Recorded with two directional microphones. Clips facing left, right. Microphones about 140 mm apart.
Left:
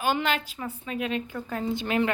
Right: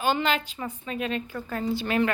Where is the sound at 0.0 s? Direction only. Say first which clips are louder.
Right 1 dB; 5° left (ahead or behind).